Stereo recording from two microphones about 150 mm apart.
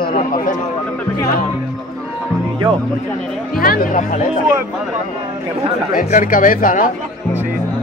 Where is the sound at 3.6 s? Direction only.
75° left (ahead or behind).